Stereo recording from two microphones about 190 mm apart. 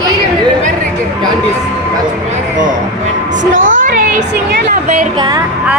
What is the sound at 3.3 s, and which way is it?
Speech, 75° right (ahead or behind).